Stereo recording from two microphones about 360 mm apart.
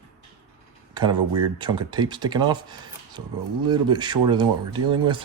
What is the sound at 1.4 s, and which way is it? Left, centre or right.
Speech, centre.